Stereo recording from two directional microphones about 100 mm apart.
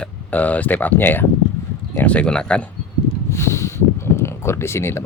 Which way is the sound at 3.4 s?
30° left (ahead or behind).